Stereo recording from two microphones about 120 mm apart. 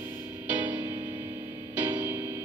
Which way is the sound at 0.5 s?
15° right (ahead or behind).